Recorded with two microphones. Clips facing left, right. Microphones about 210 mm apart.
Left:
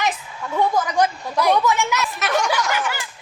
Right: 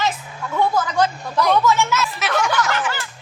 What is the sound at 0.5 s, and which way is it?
A woman's voice, 15° left (ahead or behind).